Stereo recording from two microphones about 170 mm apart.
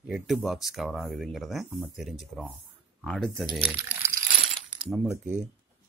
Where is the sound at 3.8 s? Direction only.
15° right (ahead or behind).